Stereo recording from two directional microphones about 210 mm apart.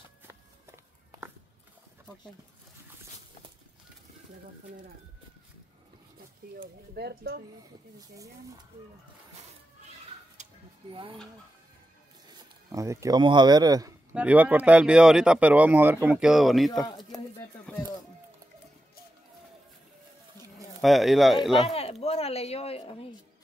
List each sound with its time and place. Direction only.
6.6 s speech: 50° right (ahead or behind)
10.3 s a sound: 30° right (ahead or behind)
12.3 s speech: 15° right (ahead or behind)
14.1 s speech: 5° right (ahead or behind)
20.5 s speech: centre (ahead or behind)
21.5 s a sound: 30° left (ahead or behind)